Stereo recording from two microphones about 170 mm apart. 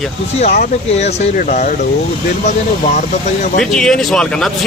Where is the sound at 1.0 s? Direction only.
40° left (ahead or behind).